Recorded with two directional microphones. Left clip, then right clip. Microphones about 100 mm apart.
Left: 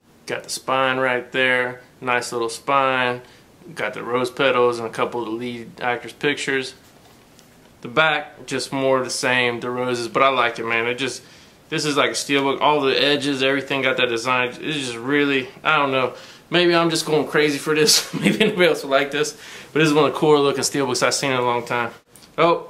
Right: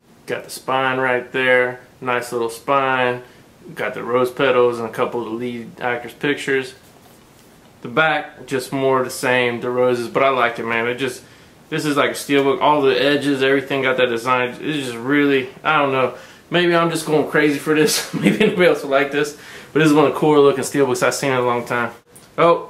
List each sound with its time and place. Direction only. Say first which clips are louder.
0.3 s speech: right 1 dB; 30° left (ahead or behind)
7.8 s a man's voice: right 1 dB; 30° left (ahead or behind)